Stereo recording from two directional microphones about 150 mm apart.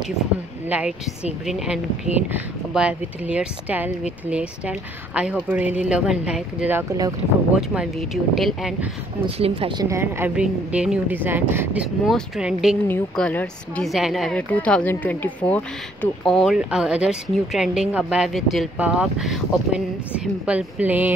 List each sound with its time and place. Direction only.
0.7 s speech: 10° right (ahead or behind)
6.9 s speech: 25° right (ahead or behind)
7.5 s speech: 5° right (ahead or behind)
9.2 s speech: 35° right (ahead or behind)
9.8 s speech: 15° right (ahead or behind)
10.3 s speech: 5° right (ahead or behind)
13.1 s speech: 10° left (ahead or behind)
13.8 s speech: centre (ahead or behind)